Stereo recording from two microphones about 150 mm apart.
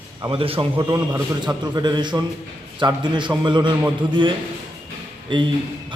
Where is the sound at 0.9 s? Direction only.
25° right (ahead or behind).